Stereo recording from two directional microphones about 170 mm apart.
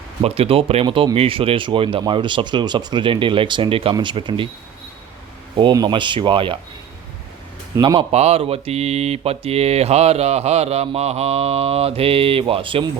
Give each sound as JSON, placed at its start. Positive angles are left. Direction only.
{"t": 0.2, "sound": "speech", "side_deg": -35}
{"t": 5.5, "sound": "speech", "side_deg": -25}
{"t": 7.8, "sound": "speech", "side_deg": -25}
{"t": 8.1, "sound": "mantra", "side_deg": -40}